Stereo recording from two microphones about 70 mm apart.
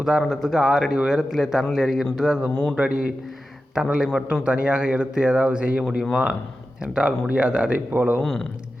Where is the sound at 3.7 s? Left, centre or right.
Centre.